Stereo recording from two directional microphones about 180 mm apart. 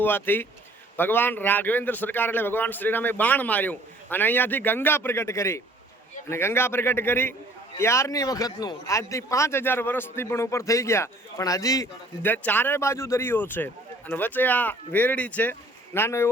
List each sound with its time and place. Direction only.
0.0 s a man's voice: 10° left (ahead or behind)